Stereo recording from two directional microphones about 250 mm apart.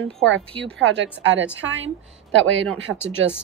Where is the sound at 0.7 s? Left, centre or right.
Right.